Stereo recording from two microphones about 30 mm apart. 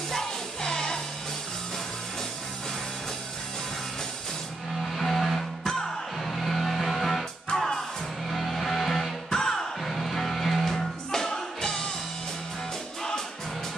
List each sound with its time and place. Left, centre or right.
0.1 s music: left
4.9 s music: centre
7.5 s music: centre
8.3 s music: centre